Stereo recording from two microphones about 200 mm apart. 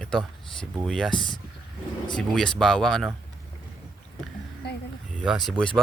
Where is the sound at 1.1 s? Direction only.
25° left (ahead or behind).